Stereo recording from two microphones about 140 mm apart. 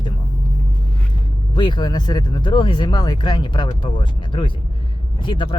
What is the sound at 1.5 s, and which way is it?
Speech, 35° left (ahead or behind).